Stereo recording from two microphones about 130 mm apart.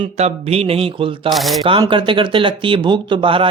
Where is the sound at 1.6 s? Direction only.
40° right (ahead or behind).